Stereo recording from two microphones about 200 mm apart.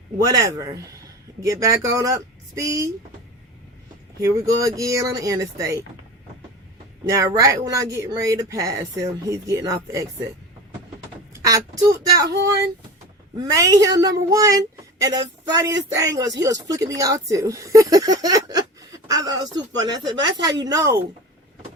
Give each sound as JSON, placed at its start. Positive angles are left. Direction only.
{"t": 0.2, "sound": "speech", "side_deg": -15}
{"t": 4.2, "sound": "speech", "side_deg": -15}
{"t": 7.1, "sound": "speech", "side_deg": -15}
{"t": 11.4, "sound": "speech", "side_deg": -15}
{"t": 13.4, "sound": "speech", "side_deg": -15}